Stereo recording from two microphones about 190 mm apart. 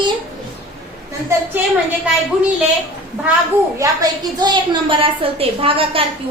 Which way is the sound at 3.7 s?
20° right (ahead or behind).